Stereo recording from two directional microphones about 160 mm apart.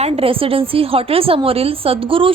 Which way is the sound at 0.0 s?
35° right (ahead or behind).